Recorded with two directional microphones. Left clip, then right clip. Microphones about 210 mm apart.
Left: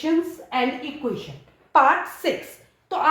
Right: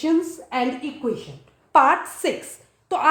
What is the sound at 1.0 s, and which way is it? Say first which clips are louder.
Speech: right 2 dB; 45° right (ahead or behind).